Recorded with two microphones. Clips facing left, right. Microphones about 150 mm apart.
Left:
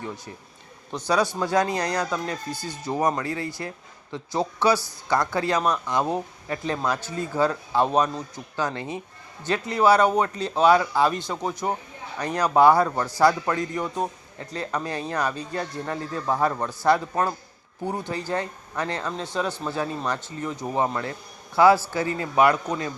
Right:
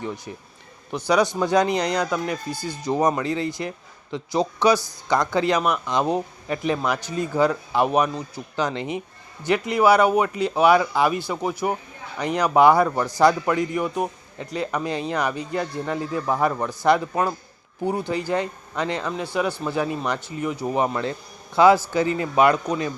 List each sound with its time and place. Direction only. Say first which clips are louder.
0.9 s a man's voice: right 3 dB; 15° right (ahead or behind)